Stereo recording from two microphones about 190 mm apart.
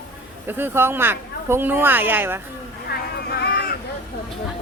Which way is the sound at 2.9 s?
55° left (ahead or behind).